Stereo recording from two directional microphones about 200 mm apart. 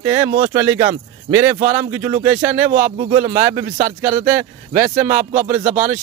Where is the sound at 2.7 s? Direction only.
40° right (ahead or behind).